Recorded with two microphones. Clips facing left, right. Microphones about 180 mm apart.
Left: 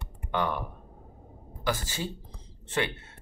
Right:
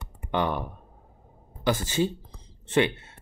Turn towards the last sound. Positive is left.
turn(degrees=-20)  # may be behind; listen again after turning